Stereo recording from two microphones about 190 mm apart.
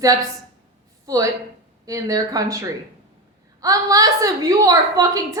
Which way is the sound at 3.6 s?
20° right (ahead or behind).